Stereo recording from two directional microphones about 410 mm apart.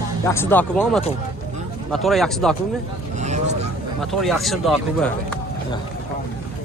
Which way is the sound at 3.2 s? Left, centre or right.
Centre.